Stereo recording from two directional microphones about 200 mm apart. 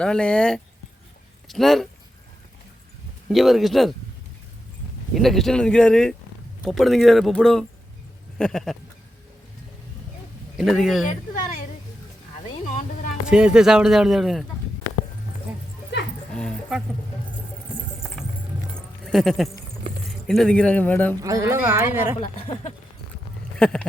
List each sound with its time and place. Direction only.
0.0 s speech: 5° left (ahead or behind)
3.2 s speech: centre (ahead or behind)
5.1 s speech: centre (ahead or behind)
10.6 s speech: centre (ahead or behind)
13.2 s speech: 5° right (ahead or behind)
16.3 s a sound: 5° left (ahead or behind)
18.0 s vehicle: centre (ahead or behind)
18.7 s a sound: centre (ahead or behind)
20.1 s a man's voice: centre (ahead or behind)
21.2 s a woman's voice: 15° right (ahead or behind)
22.2 s speech: 25° left (ahead or behind)
23.6 s a sound: 5° left (ahead or behind)